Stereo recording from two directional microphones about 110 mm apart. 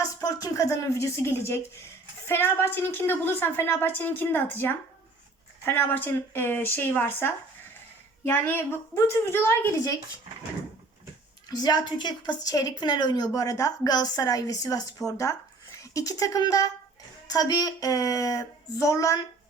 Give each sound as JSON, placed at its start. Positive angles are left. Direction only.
{"t": 0.0, "sound": "a woman's voice", "side_deg": 35}
{"t": 11.4, "sound": "a woman's voice", "side_deg": 40}